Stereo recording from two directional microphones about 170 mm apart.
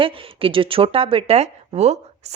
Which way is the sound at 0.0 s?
30° right (ahead or behind).